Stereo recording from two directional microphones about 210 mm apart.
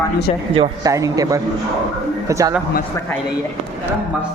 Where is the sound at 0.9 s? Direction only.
15° right (ahead or behind).